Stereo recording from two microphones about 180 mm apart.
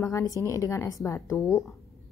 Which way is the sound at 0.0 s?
15° left (ahead or behind).